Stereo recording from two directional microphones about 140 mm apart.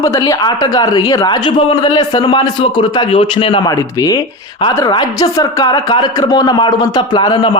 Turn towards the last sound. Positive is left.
turn(degrees=35)  # may be behind; listen again after turning